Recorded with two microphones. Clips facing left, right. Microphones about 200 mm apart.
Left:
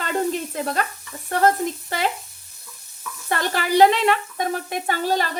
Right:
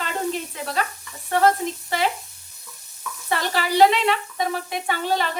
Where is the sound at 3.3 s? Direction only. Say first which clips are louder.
Left 2 dB; 50° left (ahead or behind).